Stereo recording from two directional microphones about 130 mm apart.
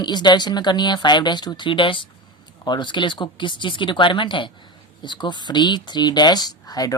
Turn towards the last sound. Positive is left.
turn(degrees=30)  # may be behind; listen again after turning